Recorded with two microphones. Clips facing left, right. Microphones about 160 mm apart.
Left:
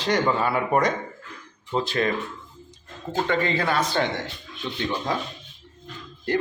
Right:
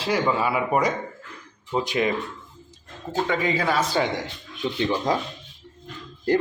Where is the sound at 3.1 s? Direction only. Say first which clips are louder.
Even; 5° right (ahead or behind).